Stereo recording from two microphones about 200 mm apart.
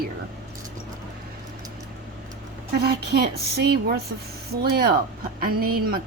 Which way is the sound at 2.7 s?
55° right (ahead or behind).